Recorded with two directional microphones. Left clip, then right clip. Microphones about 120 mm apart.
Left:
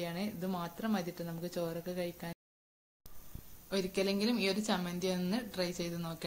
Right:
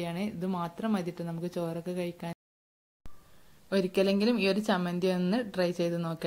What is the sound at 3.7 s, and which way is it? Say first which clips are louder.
A woman's voice: right 7 dB; 60° right (ahead or behind).